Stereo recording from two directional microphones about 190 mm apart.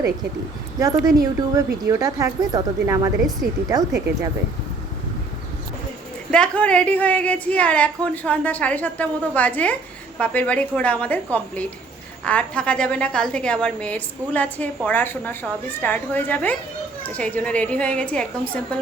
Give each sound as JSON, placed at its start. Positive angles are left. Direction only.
{"t": 0.8, "sound": "speech", "side_deg": -15}
{"t": 6.3, "sound": "a woman's voice", "side_deg": 5}